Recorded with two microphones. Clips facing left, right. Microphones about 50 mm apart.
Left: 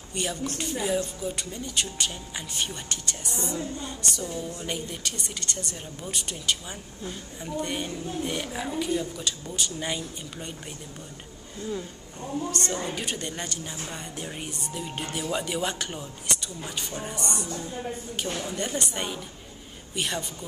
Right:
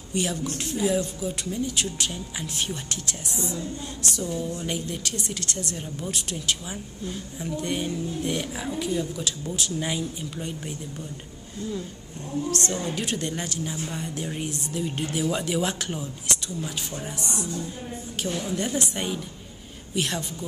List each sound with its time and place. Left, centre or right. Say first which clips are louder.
0.1 s a woman's voice: right 3 dB; centre
11.6 s speech: even; left
12.4 s a woman's voice: right 3 dB; centre
18.5 s a woman's voice: right 3 dB; centre